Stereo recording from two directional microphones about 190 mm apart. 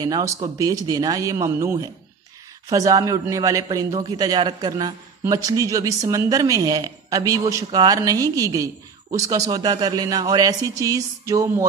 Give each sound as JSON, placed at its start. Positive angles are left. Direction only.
{"t": 0.0, "sound": "a man's voice", "side_deg": -20}